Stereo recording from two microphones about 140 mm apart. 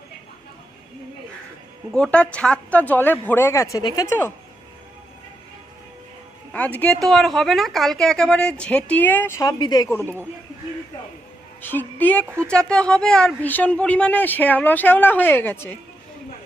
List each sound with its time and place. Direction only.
1.9 s a woman's voice: 5° left (ahead or behind); by 4.2 s 25° left (ahead or behind)
6.5 s speech: 10° left (ahead or behind)
7.0 s speech: centre (ahead or behind)
9.4 s speech: 30° left (ahead or behind)
11.6 s a woman's voice: 15° left (ahead or behind)